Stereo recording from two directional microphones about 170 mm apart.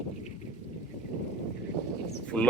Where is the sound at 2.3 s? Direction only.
5° left (ahead or behind).